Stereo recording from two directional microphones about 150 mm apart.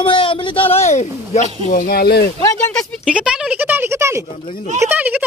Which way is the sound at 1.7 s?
80° left.